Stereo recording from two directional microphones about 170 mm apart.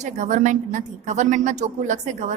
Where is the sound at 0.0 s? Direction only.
45° right (ahead or behind).